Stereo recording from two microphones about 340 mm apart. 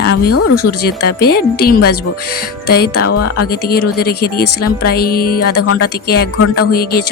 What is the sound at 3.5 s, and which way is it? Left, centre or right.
Speech, left.